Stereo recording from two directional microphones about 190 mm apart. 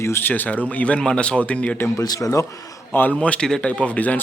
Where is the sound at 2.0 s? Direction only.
20° left (ahead or behind).